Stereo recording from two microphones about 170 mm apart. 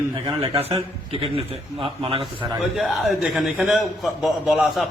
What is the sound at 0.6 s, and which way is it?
A man's voice, 35° right (ahead or behind).